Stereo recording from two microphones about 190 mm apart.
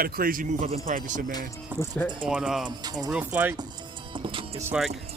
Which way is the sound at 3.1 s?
5° right (ahead or behind).